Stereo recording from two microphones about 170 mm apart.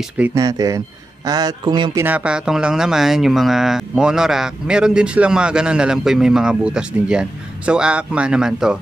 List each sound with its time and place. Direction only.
0.2 s a man's voice: 20° right (ahead or behind)
2.0 s speech: 5° right (ahead or behind)